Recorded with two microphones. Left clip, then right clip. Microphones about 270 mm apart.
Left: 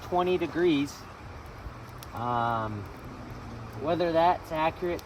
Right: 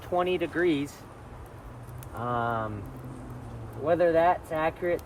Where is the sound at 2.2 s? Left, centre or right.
Centre.